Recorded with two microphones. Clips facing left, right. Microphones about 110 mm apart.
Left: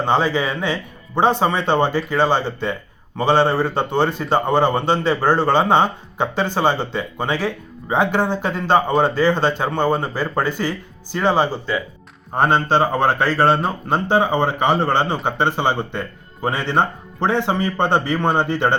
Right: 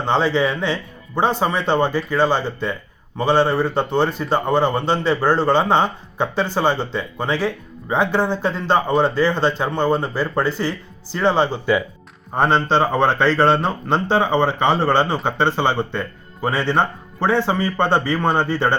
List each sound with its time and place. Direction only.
0.0 s a man's voice: 15° left (ahead or behind)